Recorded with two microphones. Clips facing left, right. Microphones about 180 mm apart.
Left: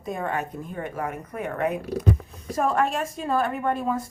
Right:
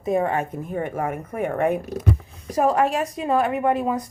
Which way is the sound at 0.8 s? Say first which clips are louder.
Right 5 dB; 50° right (ahead or behind).